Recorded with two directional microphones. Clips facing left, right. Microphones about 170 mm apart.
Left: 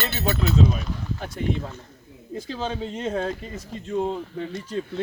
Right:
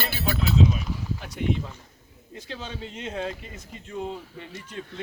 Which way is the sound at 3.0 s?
45° left (ahead or behind).